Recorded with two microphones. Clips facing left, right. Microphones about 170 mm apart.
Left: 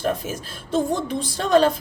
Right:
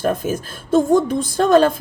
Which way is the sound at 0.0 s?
50° right (ahead or behind).